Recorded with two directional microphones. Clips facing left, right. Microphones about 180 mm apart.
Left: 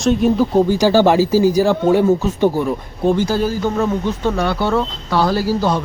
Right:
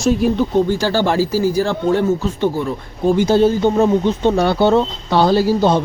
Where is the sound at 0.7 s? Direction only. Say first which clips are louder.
Left 4 dB; 15° left (ahead or behind).